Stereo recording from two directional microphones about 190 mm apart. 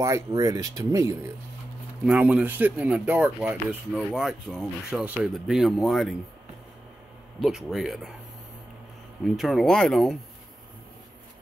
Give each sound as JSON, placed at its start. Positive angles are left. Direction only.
{"t": 0.0, "sound": "speech", "side_deg": -15}
{"t": 2.0, "sound": "speech", "side_deg": -5}
{"t": 7.3, "sound": "speech", "side_deg": 0}
{"t": 9.2, "sound": "speech", "side_deg": 0}